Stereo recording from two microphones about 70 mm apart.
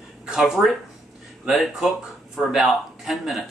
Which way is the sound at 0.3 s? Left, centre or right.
Centre.